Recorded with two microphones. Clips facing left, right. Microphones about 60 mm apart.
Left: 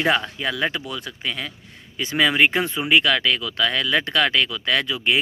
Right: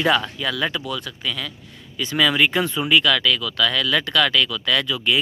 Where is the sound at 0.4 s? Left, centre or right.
Left.